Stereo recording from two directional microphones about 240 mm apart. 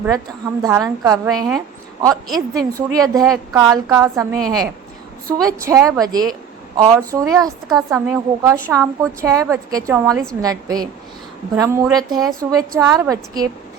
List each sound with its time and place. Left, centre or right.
0.6 s a woman's voice: centre